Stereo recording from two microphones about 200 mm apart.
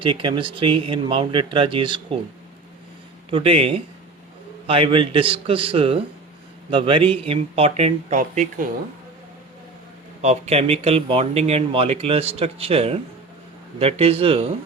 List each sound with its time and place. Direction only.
0.0 s speech: 25° right (ahead or behind)
3.2 s speech: 25° right (ahead or behind)
10.2 s speech: 35° right (ahead or behind)